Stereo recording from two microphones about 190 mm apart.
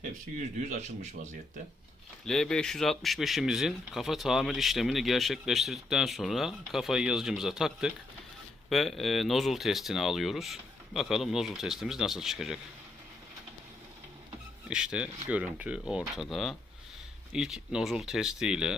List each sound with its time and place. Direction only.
0.7 s speech: 35° right (ahead or behind)
2.2 s speech: 5° left (ahead or behind)
14.7 s speech: 5° right (ahead or behind)